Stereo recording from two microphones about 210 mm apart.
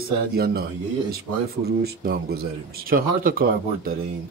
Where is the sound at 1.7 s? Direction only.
45° right (ahead or behind).